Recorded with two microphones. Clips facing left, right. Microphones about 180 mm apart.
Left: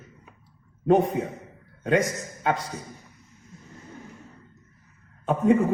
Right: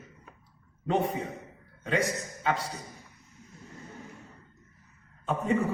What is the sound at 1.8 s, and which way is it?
Speech, 55° left (ahead or behind).